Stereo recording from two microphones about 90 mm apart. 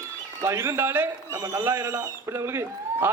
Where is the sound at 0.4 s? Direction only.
30° right (ahead or behind).